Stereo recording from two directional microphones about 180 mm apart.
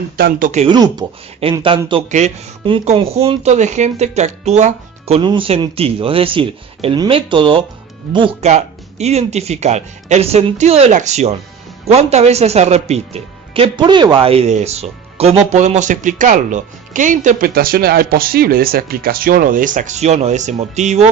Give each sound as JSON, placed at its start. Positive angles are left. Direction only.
{"t": 0.2, "sound": "speech", "side_deg": -55}
{"t": 0.6, "sound": "speech", "side_deg": -25}
{"t": 2.0, "sound": "speech", "side_deg": -40}